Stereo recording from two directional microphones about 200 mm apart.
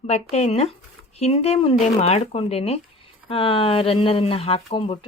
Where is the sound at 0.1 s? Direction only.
35° left (ahead or behind).